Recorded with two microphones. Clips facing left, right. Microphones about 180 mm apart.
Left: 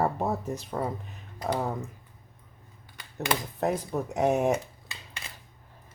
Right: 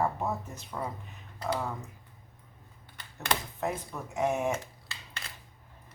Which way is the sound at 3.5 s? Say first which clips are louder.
Left 6 dB; 40° left (ahead or behind).